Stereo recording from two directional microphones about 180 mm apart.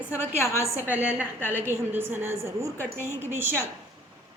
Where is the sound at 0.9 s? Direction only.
10° right (ahead or behind).